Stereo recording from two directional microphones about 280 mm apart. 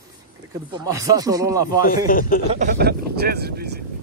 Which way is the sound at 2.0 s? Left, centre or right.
Left.